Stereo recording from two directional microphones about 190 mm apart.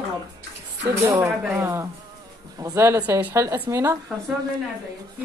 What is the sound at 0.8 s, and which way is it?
A woman's voice, 15° right (ahead or behind).